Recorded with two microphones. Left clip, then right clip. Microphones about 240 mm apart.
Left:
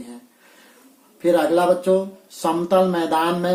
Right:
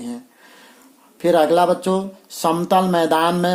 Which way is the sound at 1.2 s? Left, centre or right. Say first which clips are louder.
Right 3 dB; right.